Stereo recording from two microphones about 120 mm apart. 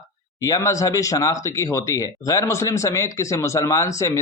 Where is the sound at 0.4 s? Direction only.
30° left (ahead or behind).